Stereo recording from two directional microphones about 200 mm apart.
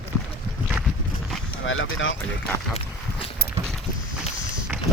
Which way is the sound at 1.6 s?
75° left (ahead or behind).